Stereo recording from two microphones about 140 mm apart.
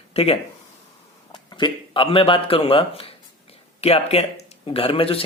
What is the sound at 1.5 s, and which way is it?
Speech, 35° left (ahead or behind).